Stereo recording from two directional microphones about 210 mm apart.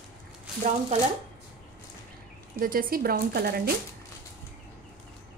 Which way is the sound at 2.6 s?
40° right (ahead or behind).